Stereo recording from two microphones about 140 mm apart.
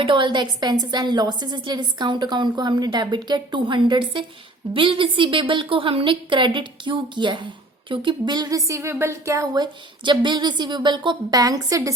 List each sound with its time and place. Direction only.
0.0 s a woman's voice: 35° right (ahead or behind)